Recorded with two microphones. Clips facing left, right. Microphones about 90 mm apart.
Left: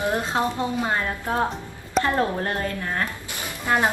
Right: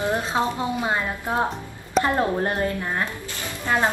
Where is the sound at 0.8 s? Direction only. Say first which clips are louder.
Even; 15° right (ahead or behind).